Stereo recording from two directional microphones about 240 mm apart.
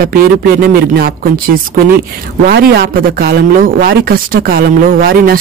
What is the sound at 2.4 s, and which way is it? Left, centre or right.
Speech, right.